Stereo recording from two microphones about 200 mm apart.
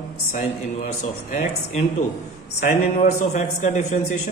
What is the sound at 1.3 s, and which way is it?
Speech, 35° left (ahead or behind).